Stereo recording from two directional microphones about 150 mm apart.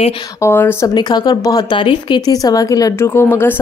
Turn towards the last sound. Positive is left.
turn(degrees=15)  # may be behind; listen again after turning